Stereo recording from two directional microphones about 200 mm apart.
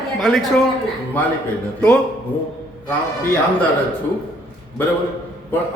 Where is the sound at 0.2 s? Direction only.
Centre (ahead or behind).